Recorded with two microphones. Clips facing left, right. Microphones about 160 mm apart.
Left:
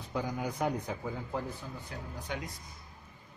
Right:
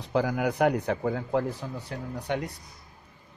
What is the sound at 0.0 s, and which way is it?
A man's voice, 80° right.